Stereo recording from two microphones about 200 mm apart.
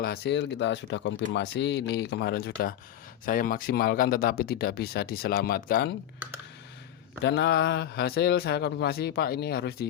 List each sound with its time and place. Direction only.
0.0 s speech: 55° left (ahead or behind)
7.3 s speech: 55° left (ahead or behind)